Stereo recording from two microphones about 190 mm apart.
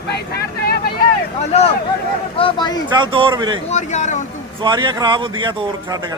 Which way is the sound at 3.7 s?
40° left (ahead or behind).